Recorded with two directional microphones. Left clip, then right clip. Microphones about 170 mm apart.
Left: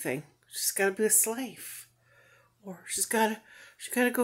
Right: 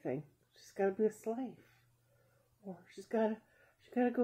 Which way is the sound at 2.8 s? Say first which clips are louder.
Left 8 dB; 15° left (ahead or behind).